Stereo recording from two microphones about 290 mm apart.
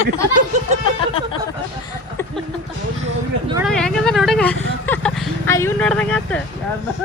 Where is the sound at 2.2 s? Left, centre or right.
Centre.